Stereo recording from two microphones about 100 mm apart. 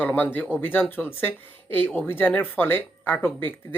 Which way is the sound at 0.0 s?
20° left (ahead or behind).